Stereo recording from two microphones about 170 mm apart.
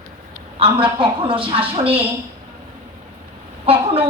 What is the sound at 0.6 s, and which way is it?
A woman's voice, 30° right (ahead or behind).